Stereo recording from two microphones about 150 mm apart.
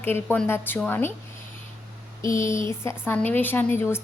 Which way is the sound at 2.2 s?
20° left (ahead or behind).